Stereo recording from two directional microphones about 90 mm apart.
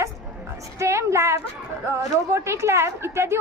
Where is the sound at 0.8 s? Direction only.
30° right (ahead or behind).